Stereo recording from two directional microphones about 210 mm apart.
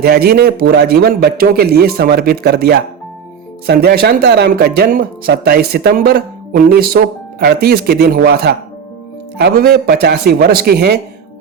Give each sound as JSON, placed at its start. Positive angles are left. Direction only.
{"t": 0.0, "sound": "speech", "side_deg": -50}